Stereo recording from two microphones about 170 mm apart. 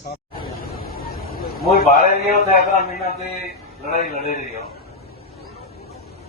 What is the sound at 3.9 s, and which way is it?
Speech, 50° left (ahead or behind).